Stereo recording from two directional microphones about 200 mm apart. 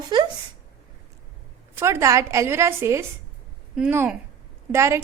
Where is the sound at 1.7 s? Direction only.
15° right (ahead or behind).